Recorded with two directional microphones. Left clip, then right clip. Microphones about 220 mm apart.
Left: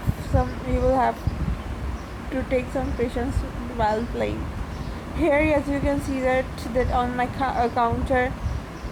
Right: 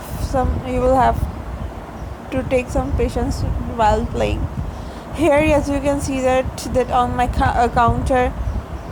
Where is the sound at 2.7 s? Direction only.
10° right (ahead or behind).